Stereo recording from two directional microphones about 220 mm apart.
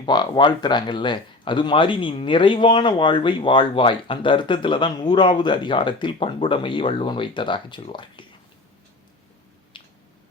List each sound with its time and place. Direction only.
0.0 s speech: 20° left (ahead or behind)
9.7 s squish: 20° left (ahead or behind)